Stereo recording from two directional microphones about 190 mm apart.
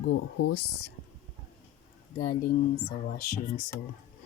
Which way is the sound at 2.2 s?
45° left (ahead or behind).